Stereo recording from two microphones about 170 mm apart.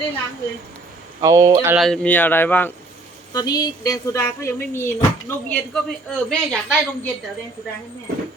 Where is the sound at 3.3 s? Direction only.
20° left (ahead or behind); by 6.6 s 5° left (ahead or behind).